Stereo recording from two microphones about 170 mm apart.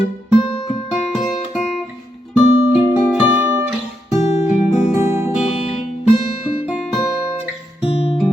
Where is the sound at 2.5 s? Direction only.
45° right (ahead or behind).